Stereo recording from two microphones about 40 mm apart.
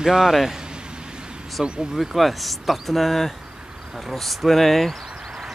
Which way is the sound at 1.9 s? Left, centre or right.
Centre.